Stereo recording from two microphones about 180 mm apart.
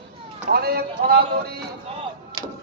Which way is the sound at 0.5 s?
60° right (ahead or behind).